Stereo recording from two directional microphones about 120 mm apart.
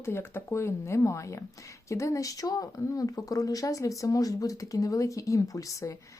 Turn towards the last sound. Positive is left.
turn(degrees=30)  # may be behind; listen again after turning